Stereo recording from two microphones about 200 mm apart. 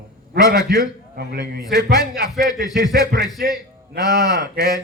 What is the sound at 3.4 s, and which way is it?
Speech, 50° right (ahead or behind).